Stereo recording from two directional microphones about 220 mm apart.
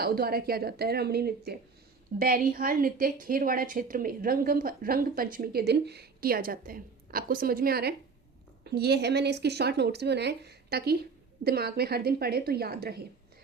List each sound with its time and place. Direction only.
0.0 s a woman's voice: 45° right (ahead or behind)